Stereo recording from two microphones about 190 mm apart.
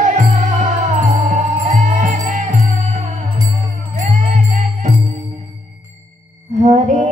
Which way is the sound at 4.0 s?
40° right (ahead or behind).